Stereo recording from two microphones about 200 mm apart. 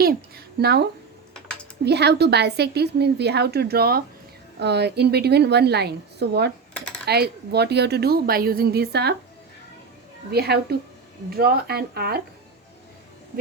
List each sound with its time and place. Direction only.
0.0 s a sound: 50° right (ahead or behind)
1.8 s a woman's voice: 55° right (ahead or behind)
10.3 s a woman's voice: 55° right (ahead or behind)